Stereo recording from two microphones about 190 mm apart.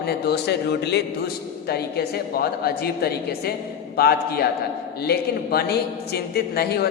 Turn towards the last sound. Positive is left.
turn(degrees=55)  # may be behind; listen again after turning